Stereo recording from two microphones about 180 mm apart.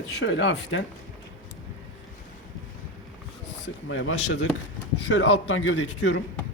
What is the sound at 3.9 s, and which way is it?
Speech, 90° left.